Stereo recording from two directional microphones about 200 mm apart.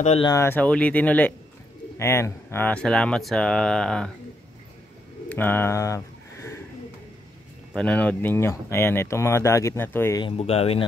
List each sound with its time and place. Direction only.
0.0 s speech: 30° left (ahead or behind)
0.3 s speech: 10° left (ahead or behind)
5.3 s a sound: 10° left (ahead or behind)
7.7 s speech: 5° left (ahead or behind)
10.2 s speech: 30° left (ahead or behind)